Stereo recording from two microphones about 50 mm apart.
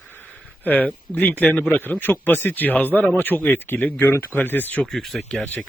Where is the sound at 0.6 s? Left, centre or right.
Left.